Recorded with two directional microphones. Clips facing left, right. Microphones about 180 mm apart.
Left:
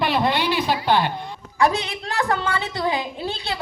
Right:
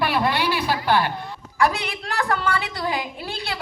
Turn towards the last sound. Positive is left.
turn(degrees=20)  # may be behind; listen again after turning